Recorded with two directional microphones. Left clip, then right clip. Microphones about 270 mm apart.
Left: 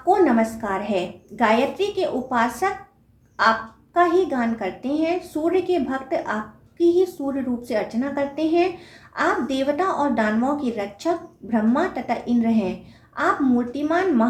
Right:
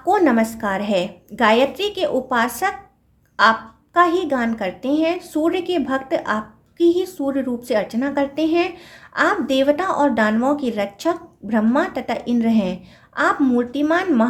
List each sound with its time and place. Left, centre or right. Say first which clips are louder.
0.1 s a woman's voice: right 1 dB; right